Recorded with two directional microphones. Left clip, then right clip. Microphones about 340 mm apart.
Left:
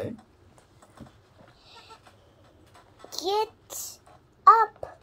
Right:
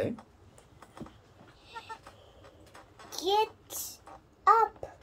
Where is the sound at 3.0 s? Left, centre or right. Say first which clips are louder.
Left 1 dB; centre.